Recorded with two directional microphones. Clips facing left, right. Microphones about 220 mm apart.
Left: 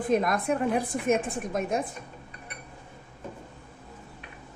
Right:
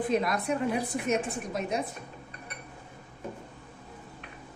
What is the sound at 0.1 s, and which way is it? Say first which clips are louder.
A woman's voice: left 6 dB; 50° left (ahead or behind).